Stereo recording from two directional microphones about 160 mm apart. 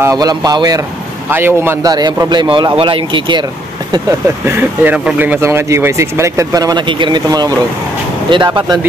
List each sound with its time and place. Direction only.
0.0 s a man's voice: 25° right (ahead or behind)
1.3 s a man's voice: 15° right (ahead or behind); by 3.4 s 30° right (ahead or behind)
4.5 s a man's voice: 10° right (ahead or behind)